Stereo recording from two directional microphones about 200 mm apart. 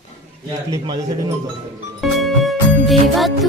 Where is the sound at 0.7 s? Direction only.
15° right (ahead or behind).